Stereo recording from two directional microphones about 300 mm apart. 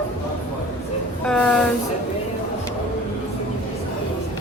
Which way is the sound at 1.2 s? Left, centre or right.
Centre.